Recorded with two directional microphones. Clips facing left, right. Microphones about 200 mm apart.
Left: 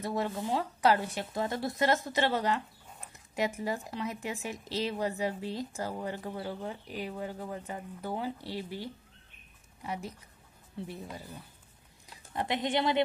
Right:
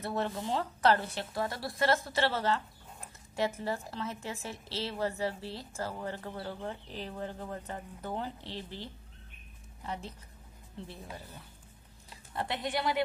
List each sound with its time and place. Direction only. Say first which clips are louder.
0.0 s a woman's voice: left 1 dB; 15° left (ahead or behind)